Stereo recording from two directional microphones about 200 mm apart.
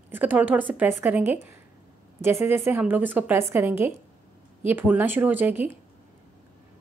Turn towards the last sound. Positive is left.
turn(degrees=-10)  # may be behind; listen again after turning